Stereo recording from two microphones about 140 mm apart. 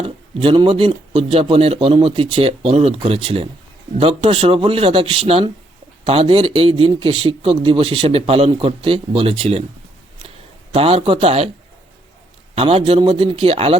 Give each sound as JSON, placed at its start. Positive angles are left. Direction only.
{"t": 0.0, "sound": "speech", "side_deg": -40}
{"t": 10.2, "sound": "a sound", "side_deg": -45}
{"t": 12.5, "sound": "speech", "side_deg": -45}